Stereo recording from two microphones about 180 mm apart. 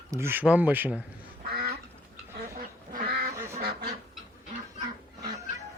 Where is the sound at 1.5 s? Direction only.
55° right (ahead or behind).